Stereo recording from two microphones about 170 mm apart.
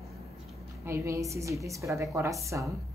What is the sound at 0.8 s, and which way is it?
A woman's voice, 15° right (ahead or behind).